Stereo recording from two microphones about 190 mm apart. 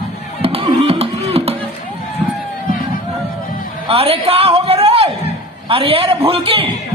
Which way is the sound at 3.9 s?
30° right (ahead or behind).